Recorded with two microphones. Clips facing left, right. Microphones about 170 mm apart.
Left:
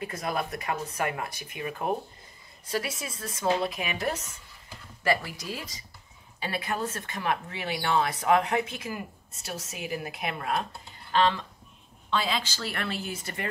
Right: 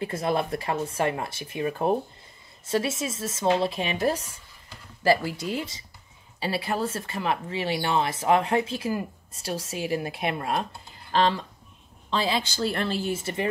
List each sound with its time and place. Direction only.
0.0 s speech: 30° right (ahead or behind)